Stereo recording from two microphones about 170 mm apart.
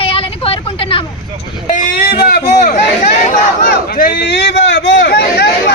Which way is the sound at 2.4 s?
45° left (ahead or behind).